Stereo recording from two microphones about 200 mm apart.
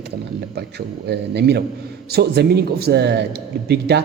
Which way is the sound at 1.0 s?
55° right (ahead or behind).